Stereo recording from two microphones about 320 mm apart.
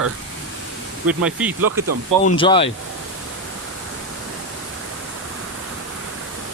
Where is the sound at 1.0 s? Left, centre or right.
Centre.